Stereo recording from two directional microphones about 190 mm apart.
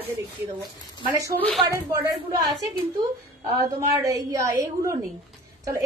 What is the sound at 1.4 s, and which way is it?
Speech, centre (ahead or behind).